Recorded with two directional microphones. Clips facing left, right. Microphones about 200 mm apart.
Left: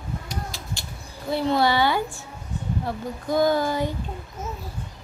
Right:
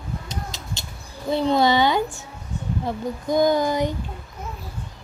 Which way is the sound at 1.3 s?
20° right (ahead or behind).